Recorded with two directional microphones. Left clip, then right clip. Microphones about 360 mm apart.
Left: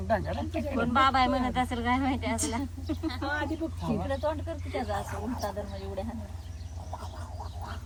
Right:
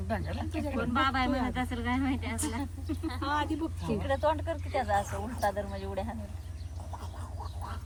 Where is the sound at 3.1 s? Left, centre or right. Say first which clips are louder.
Right 1 dB; centre.